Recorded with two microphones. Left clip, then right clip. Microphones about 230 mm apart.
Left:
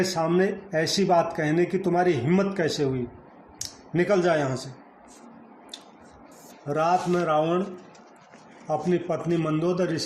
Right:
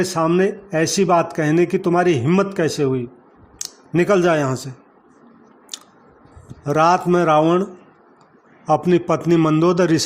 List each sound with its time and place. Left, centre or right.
0.0 s speech: right
6.7 s speech: right
8.6 s speech: right